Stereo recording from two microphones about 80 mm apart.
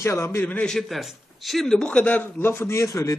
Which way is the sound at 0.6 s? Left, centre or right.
Centre.